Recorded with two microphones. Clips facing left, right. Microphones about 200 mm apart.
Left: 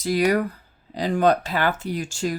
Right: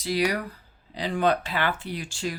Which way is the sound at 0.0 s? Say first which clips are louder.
Left 5 dB; 50° left (ahead or behind).